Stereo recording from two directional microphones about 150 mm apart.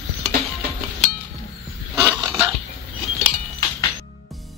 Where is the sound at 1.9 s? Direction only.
20° right (ahead or behind).